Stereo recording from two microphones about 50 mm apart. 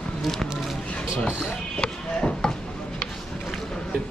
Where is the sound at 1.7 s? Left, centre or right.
Centre.